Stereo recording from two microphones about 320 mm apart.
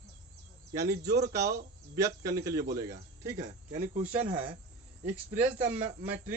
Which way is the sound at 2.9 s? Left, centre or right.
Right.